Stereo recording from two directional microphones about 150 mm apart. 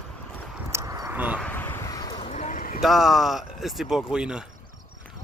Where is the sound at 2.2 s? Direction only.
50° left (ahead or behind).